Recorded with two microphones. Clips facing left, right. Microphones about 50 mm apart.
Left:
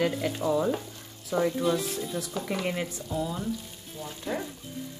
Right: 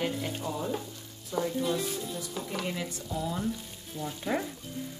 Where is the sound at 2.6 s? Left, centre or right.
Left.